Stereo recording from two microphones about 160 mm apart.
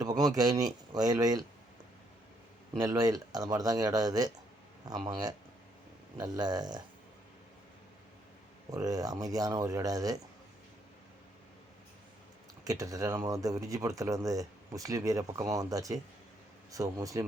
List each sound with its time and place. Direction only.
0.0 s speech: 25° right (ahead or behind)
2.7 s speech: 20° right (ahead or behind)
6.1 s speech: 25° right (ahead or behind)
8.7 s speech: 20° right (ahead or behind)
12.6 s speech: 20° right (ahead or behind)